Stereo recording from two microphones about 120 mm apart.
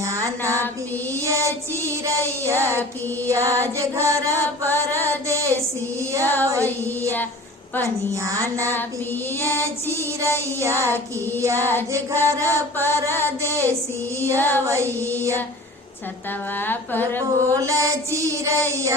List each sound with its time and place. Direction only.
0.0 s music: 25° right (ahead or behind)
1.2 s child singing: 25° right (ahead or behind)
3.2 s female singing: 25° right (ahead or behind)
6.2 s a sound: 15° left (ahead or behind)
8.1 s female singing: 25° right (ahead or behind)
9.9 s female singing: 25° right (ahead or behind)
11.6 s a sound: 15° left (ahead or behind)
11.9 s female singing: 25° right (ahead or behind)
12.7 s mantra: 20° left (ahead or behind)
13.4 s female singing: 25° right (ahead or behind)
14.3 s a sound: 15° left (ahead or behind)
15.0 s female singing: 25° right (ahead or behind)
16.6 s a sound: 15° left (ahead or behind)
17.2 s female singing: 25° right (ahead or behind)